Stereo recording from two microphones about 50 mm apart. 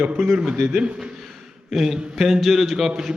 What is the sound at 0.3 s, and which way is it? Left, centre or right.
A man's voice, centre.